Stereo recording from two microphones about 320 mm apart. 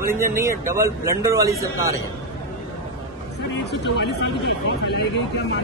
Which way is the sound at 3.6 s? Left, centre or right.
Left.